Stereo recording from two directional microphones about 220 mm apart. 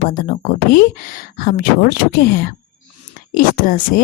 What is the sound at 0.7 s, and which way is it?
Speech, 40° left (ahead or behind).